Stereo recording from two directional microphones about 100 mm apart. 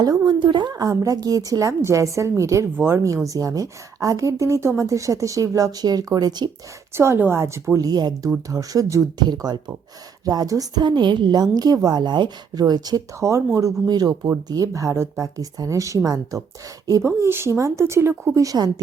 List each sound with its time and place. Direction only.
0.3 s a woman's voice: 50° right (ahead or behind)
6.9 s speech: 25° right (ahead or behind)
7.9 s a woman's voice: 40° right (ahead or behind)
9.2 s a woman's voice: 45° right (ahead or behind)
13.1 s speech: 30° right (ahead or behind)
13.8 s a woman's voice: 40° right (ahead or behind)
18.3 s a woman's voice: 40° right (ahead or behind)